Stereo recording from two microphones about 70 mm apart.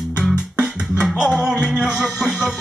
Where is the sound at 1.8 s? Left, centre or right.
Centre.